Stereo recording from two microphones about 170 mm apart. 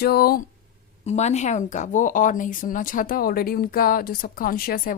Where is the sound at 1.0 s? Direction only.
40° left (ahead or behind).